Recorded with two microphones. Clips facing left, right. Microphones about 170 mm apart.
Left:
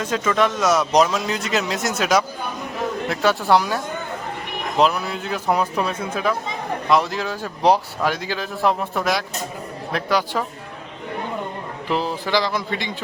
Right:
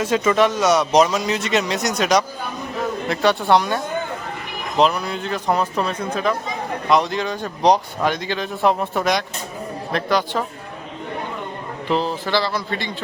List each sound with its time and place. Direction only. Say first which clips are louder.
0.0 s speech: right 3 dB; 10° right (ahead or behind); by 10.4 s 10° left (ahead or behind)
11.9 s speech: right 1 dB; 10° left (ahead or behind)